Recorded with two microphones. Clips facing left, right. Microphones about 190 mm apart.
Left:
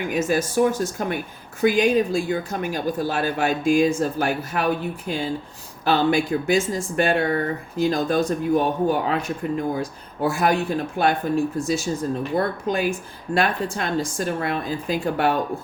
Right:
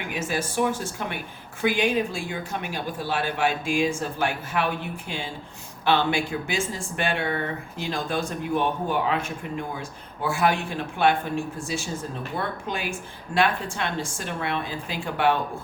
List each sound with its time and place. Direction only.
0.1 s speech: 40° left (ahead or behind)